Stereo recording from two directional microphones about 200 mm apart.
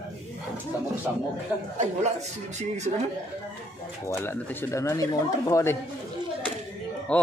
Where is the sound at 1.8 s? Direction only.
35° right (ahead or behind).